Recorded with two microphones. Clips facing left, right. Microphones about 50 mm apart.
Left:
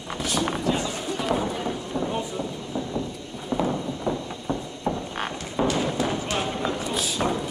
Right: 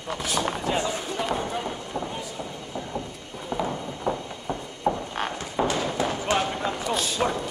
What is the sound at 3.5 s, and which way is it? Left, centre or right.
Horse, centre.